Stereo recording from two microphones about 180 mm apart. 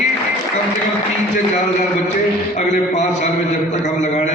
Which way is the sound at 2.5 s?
40° left (ahead or behind).